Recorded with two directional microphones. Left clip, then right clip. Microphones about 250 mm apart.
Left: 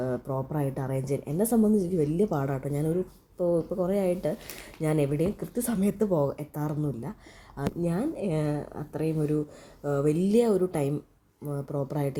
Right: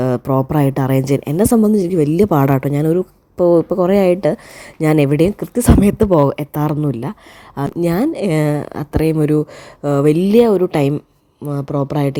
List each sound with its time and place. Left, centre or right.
0.0 s speech: right